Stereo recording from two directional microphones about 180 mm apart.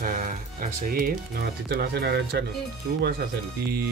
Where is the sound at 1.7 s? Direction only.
65° right (ahead or behind).